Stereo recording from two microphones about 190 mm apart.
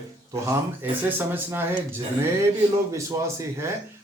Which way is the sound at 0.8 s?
10° right (ahead or behind).